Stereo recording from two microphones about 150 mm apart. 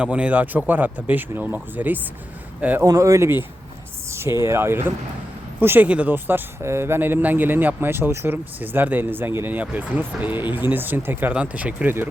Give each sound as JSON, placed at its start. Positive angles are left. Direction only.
{"t": 0.0, "sound": "speech", "side_deg": -10}
{"t": 2.8, "sound": "speech", "side_deg": -20}